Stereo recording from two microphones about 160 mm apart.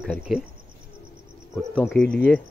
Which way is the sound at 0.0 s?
5° right (ahead or behind).